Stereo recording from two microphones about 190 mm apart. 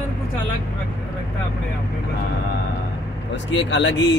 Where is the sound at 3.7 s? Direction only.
70° left (ahead or behind).